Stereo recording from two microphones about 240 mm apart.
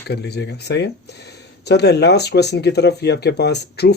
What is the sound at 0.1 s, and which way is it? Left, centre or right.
Speech, left.